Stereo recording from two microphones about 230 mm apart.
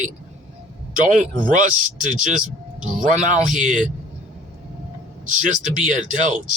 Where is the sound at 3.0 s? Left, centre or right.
Right.